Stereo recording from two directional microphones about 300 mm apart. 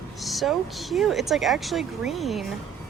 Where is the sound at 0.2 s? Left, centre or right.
Centre.